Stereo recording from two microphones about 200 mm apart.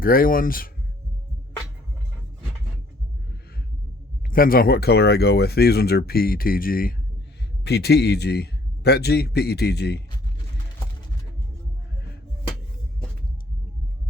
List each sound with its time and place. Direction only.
0.0 s speech: 45° left (ahead or behind)
4.3 s a man's voice: 45° left (ahead or behind)